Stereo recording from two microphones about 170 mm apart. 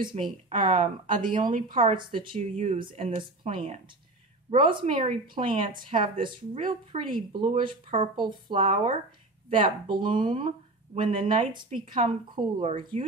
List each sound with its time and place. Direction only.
0.1 s speech: 40° right (ahead or behind)
1.8 s speech: 30° right (ahead or behind)
8.5 s speech: 40° right (ahead or behind)
9.5 s speech: 30° right (ahead or behind)
11.9 s speech: 45° right (ahead or behind)
12.3 s speech: 30° right (ahead or behind)